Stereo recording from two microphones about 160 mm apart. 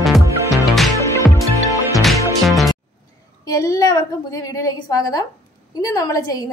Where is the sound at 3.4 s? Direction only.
20° left (ahead or behind).